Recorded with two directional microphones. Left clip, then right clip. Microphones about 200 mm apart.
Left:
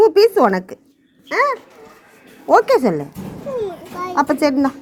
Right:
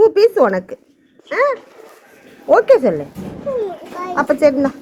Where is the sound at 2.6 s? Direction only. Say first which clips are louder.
Right 3 dB; 65° left (ahead or behind).